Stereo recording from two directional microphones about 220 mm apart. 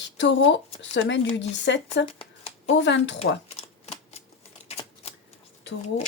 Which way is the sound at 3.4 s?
30° left (ahead or behind).